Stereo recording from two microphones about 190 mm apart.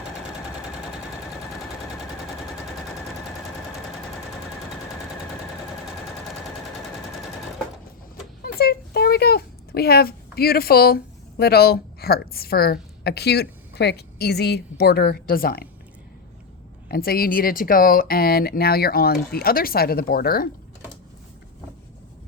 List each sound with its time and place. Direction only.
8.4 s a child's voice: 55° left (ahead or behind)
16.9 s speech: 50° left (ahead or behind)